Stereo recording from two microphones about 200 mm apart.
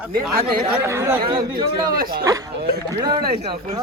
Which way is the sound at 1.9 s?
50° right (ahead or behind).